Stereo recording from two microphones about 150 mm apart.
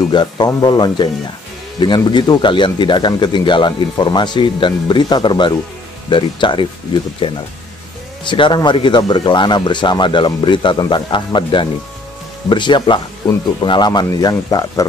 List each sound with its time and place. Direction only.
0.1 s speech: 30° left (ahead or behind)